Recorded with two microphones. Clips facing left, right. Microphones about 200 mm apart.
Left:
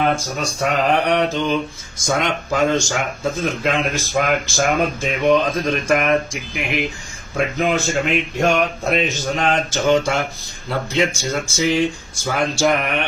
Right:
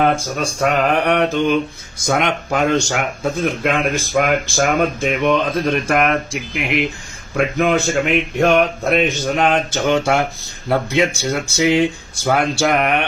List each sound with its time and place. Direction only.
0.3 s speech: 55° right (ahead or behind)